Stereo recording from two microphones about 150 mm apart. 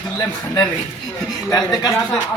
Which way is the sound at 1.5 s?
25° left (ahead or behind).